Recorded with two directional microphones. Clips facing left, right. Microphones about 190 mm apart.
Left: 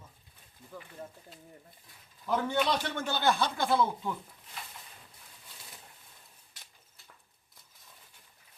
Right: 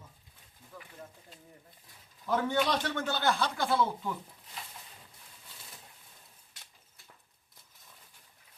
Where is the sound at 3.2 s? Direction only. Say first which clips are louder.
Left 3 dB; 20° left (ahead or behind).